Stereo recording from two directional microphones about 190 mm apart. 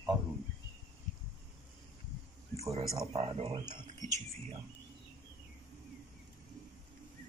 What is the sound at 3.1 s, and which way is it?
Speech, 30° right (ahead or behind).